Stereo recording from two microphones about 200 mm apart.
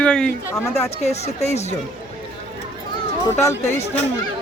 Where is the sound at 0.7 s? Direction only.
30° left (ahead or behind).